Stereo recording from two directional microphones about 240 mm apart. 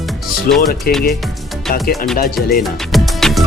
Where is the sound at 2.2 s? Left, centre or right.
Left.